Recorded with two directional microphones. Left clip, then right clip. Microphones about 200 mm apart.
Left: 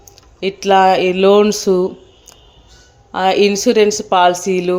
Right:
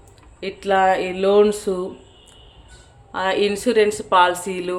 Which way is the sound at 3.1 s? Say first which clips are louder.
Left 7 dB; 30° left (ahead or behind).